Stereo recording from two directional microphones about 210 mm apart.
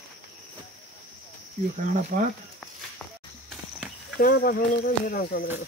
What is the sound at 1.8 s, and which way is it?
Speech, 40° right (ahead or behind).